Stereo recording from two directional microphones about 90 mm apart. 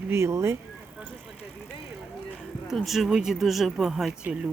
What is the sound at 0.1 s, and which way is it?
Speech, 30° right (ahead or behind).